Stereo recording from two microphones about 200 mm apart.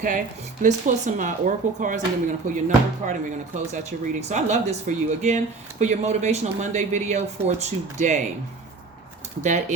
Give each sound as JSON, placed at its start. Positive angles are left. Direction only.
{"t": 0.6, "sound": "speech", "side_deg": -40}
{"t": 9.4, "sound": "speech", "side_deg": -35}